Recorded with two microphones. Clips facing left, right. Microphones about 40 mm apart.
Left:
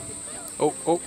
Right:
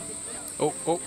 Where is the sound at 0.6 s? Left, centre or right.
Centre.